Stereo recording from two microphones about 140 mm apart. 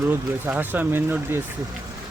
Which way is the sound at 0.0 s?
15° right (ahead or behind).